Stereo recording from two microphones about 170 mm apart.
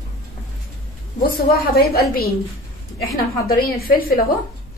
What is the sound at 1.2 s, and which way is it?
A woman's voice, 65° left (ahead or behind).